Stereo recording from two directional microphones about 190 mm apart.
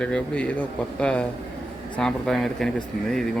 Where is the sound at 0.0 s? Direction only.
5° left (ahead or behind).